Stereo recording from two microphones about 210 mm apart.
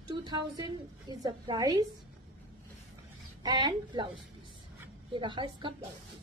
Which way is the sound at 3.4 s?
20° right (ahead or behind).